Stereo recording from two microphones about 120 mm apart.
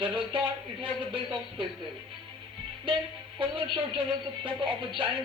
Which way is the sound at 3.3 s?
45° right (ahead or behind).